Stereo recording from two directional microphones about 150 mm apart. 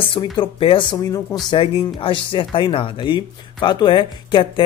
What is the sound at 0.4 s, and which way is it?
Speech, 35° left (ahead or behind).